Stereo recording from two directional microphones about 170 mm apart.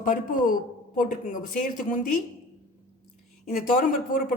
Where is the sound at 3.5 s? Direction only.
55° left (ahead or behind).